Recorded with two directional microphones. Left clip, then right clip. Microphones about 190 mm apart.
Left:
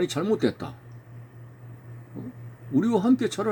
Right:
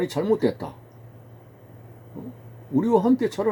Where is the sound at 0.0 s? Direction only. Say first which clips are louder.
Right 2 dB; 20° left (ahead or behind).